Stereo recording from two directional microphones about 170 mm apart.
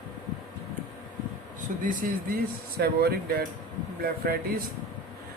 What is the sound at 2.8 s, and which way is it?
Speech, 65° right (ahead or behind).